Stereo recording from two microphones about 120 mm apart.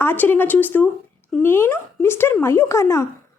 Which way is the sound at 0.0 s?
15° left (ahead or behind).